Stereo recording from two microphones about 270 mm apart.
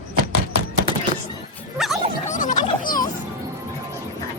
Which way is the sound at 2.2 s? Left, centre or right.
Left.